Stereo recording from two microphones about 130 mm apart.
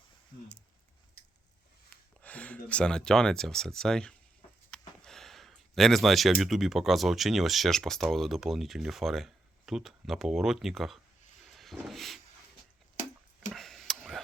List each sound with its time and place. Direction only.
2.2 s speech: 10° left (ahead or behind)
11.4 s vehicle: centre (ahead or behind)
13.5 s tick-tock: centre (ahead or behind)